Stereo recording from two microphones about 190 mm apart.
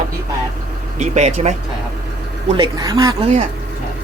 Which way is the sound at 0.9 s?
40° right (ahead or behind).